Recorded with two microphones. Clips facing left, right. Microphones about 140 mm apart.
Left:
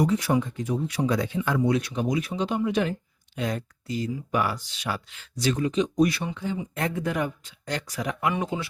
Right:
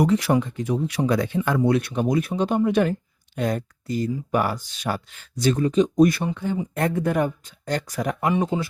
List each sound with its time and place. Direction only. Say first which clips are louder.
0.0 s speech: right 3 dB; 65° right (ahead or behind); by 8.3 s 45° right (ahead or behind)
8.3 s speech: right 7 dB; 35° right (ahead or behind)